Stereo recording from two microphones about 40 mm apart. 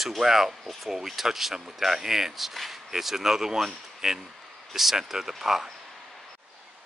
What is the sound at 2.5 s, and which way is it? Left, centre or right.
Speech, centre.